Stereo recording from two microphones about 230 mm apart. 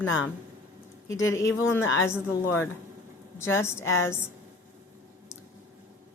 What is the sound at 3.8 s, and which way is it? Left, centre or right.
Speech, left.